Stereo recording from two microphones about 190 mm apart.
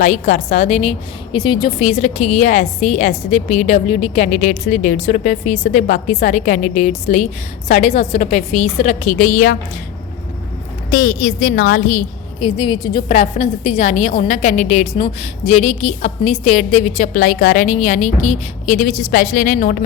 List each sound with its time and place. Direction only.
0.0 s a woman's voice: 40° left (ahead or behind)
10.9 s a woman's voice: 50° left (ahead or behind)
12.4 s a woman's voice: 30° left (ahead or behind)
13.1 s a woman's voice: 35° left (ahead or behind)